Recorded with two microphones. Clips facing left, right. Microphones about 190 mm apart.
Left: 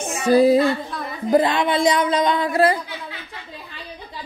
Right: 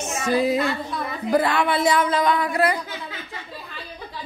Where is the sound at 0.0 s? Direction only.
35° left (ahead or behind).